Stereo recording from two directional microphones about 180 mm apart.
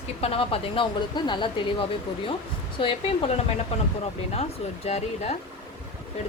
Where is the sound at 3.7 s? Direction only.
35° left (ahead or behind).